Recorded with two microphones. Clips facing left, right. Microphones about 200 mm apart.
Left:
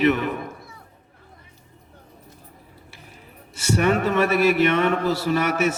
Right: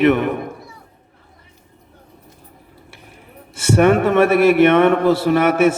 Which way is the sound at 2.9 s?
55° right (ahead or behind).